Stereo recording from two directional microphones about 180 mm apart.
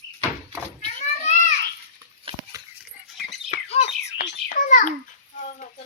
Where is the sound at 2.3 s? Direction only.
30° right (ahead or behind).